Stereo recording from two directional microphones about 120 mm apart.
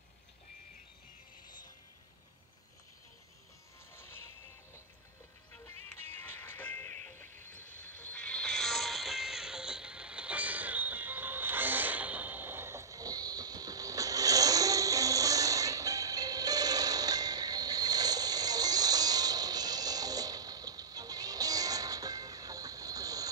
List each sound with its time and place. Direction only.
3.9 s music: 20° left (ahead or behind)
6.0 s music: 15° left (ahead or behind); by 23.3 s 30° right (ahead or behind)